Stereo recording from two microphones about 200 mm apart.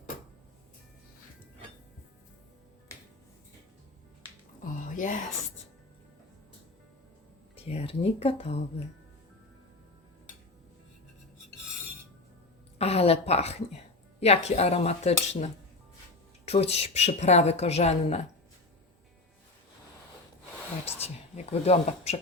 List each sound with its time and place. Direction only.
4.6 s a sound: 40° left (ahead or behind)
7.5 s speech: 30° left (ahead or behind)
12.8 s a sound: 30° left (ahead or behind)
14.2 s a woman's voice: 30° left (ahead or behind)
16.5 s a woman's voice: 30° left (ahead or behind)
20.8 s a woman's voice: 30° left (ahead or behind)